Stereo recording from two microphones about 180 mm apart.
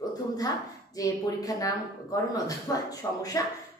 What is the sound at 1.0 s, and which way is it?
Speech, 20° left (ahead or behind).